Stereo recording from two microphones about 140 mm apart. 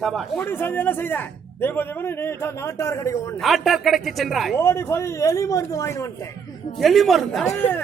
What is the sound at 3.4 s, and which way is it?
Speech, centre (ahead or behind).